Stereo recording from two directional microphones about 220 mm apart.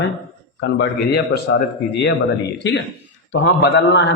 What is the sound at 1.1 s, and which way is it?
A man's voice, 50° left (ahead or behind).